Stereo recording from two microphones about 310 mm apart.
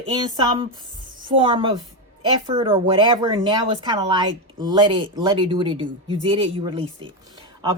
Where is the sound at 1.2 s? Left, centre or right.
Centre.